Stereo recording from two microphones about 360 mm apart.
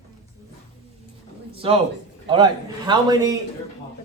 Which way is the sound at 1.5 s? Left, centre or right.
Centre.